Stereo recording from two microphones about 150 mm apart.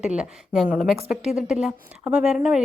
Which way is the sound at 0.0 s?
5° right (ahead or behind).